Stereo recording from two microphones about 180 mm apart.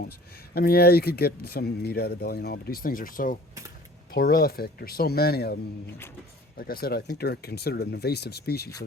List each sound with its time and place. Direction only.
0.5 s speech: 60° left (ahead or behind)